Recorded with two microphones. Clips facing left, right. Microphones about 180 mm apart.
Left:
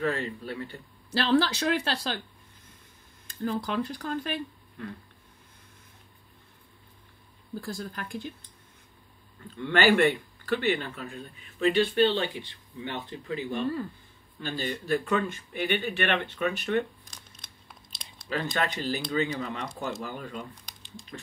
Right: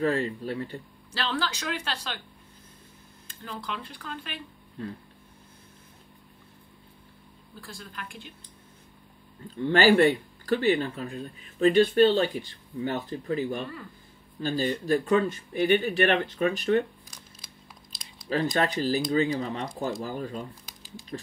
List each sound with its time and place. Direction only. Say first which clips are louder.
0.0 s speech: right 4 dB; 35° right (ahead or behind)
1.2 s speech: left 7 dB; 35° left (ahead or behind)
3.3 s speech: left 7 dB; 45° left (ahead or behind)
7.6 s speech: left 4 dB; 45° left (ahead or behind)
9.6 s speech: right 3 dB; 35° right (ahead or behind)
17.4 s tearing: right 3 dB; centre (ahead or behind)
18.3 s speech: right 4 dB; 35° right (ahead or behind)
20.6 s squish: right 2 dB; 5° right (ahead or behind)